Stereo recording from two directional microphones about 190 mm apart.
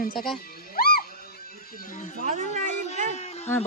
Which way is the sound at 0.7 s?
50° left (ahead or behind).